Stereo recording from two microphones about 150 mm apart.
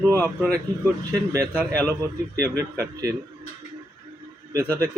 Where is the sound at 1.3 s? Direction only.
15° right (ahead or behind).